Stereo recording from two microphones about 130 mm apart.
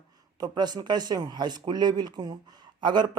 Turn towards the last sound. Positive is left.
turn(degrees=-35)  # may be behind; listen again after turning